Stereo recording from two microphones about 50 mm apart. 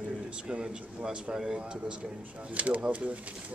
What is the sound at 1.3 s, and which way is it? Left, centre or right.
Speech, centre.